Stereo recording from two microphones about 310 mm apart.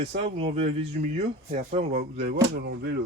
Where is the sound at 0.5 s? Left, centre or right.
Centre; by 3.0 s right.